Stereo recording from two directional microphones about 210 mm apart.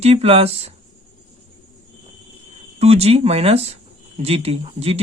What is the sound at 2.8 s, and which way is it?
Speech, 30° right (ahead or behind).